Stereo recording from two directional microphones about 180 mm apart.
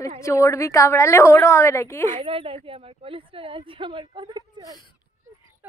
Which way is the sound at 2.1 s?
30° right (ahead or behind).